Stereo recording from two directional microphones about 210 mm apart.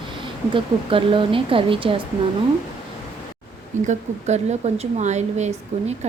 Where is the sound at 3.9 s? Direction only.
35° right (ahead or behind).